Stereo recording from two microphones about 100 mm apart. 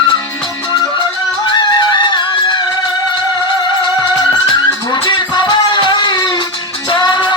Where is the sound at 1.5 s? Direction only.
50° left (ahead or behind).